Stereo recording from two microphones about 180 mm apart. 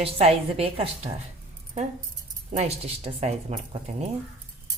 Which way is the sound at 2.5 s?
35° right (ahead or behind).